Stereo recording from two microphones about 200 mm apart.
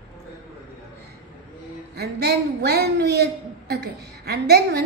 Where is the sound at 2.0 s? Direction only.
55° right (ahead or behind).